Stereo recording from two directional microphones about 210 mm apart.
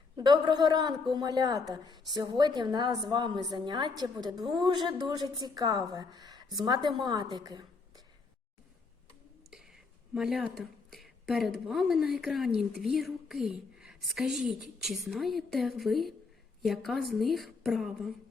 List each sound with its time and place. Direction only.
0.2 s a woman's voice: 20° right (ahead or behind)
9.5 s a sound: centre (ahead or behind)
10.6 s a woman's voice: centre (ahead or behind)